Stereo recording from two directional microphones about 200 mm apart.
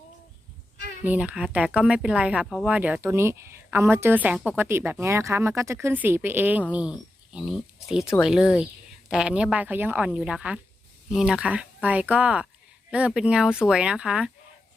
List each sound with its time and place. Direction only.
1.0 s a woman's voice: 5° right (ahead or behind)